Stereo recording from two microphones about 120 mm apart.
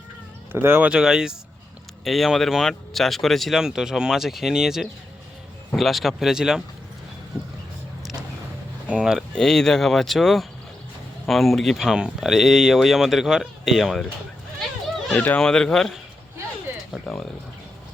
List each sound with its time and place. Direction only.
0.5 s speech: 20° right (ahead or behind)
8.9 s speech: 5° right (ahead or behind)
9.3 s speech: 5° left (ahead or behind)
15.1 s speech: 10° left (ahead or behind)